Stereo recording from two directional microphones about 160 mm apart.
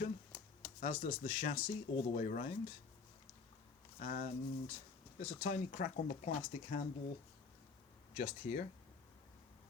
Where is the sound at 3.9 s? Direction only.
55° left (ahead or behind).